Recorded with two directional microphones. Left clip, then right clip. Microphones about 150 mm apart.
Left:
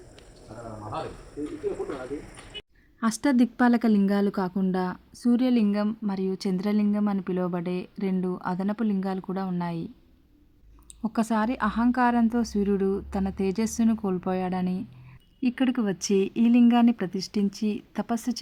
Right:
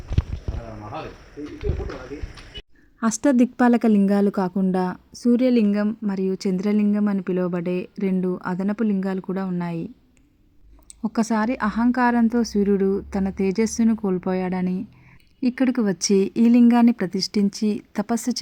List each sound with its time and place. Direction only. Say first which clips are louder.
3.0 s a woman's voice: right 5 dB; 20° right (ahead or behind)
11.0 s a woman's voice: right 3 dB; 20° right (ahead or behind)